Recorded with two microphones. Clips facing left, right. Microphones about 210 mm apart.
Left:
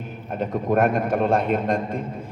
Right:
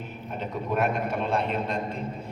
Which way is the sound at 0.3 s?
50° left (ahead or behind).